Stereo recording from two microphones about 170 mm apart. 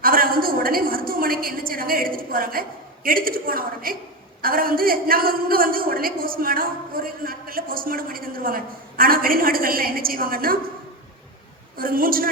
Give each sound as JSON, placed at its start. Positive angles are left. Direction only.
{"t": 0.0, "sound": "a sound", "side_deg": -60}
{"t": 4.4, "sound": "a woman's voice", "side_deg": -60}
{"t": 11.8, "sound": "a woman's voice", "side_deg": -60}